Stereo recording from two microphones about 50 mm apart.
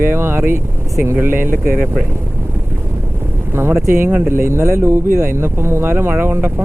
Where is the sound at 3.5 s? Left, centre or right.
Right.